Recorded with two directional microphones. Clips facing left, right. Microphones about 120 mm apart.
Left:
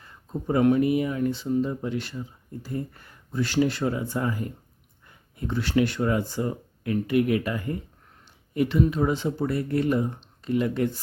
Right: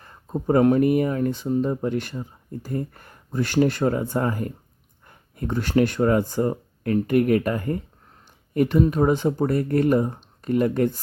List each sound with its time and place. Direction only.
0.0 s speech: 50° right (ahead or behind)